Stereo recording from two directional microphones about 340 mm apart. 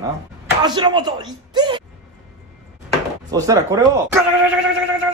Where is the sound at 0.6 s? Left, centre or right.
Centre.